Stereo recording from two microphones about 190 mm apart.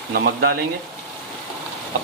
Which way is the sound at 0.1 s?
55° right (ahead or behind).